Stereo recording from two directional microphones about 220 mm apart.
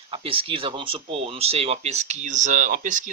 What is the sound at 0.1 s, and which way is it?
Speech, 25° right (ahead or behind).